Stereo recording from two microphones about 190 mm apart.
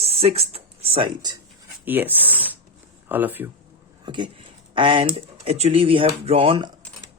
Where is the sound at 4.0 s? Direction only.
25° right (ahead or behind).